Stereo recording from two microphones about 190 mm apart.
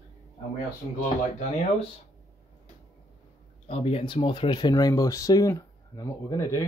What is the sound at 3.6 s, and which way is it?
Speech, 30° left (ahead or behind).